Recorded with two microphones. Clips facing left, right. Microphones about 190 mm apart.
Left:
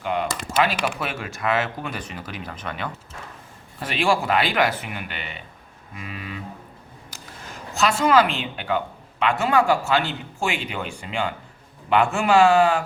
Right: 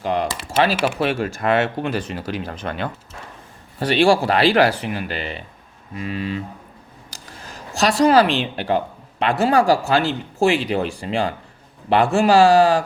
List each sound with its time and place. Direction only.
0.0 s speech: 35° right (ahead or behind)
7.8 s speech: 35° right (ahead or behind)